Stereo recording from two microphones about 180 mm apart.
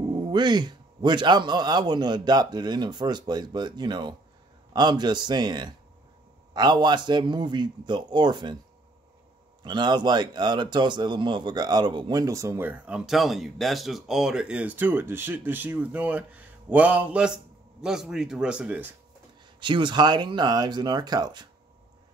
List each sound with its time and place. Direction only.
0.1 s a man's voice: 25° right (ahead or behind)
9.6 s a man's voice: 25° right (ahead or behind); by 18.9 s 5° right (ahead or behind)
19.6 s a man's voice: 25° right (ahead or behind)